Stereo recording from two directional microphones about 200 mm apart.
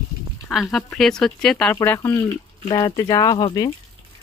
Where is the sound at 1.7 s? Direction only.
15° left (ahead or behind).